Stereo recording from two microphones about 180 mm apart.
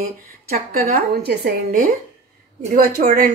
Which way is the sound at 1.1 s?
60° right (ahead or behind).